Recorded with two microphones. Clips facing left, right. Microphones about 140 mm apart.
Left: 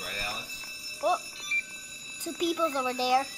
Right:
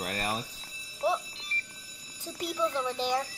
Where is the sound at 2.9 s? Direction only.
10° left (ahead or behind).